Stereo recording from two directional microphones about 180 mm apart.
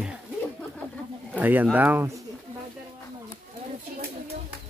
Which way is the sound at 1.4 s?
10° right (ahead or behind).